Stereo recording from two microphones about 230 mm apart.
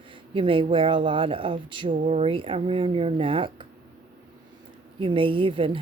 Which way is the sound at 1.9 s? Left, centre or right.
Right.